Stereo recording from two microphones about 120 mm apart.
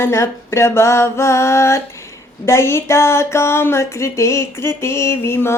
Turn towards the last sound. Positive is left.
turn(degrees=20)  # may be behind; listen again after turning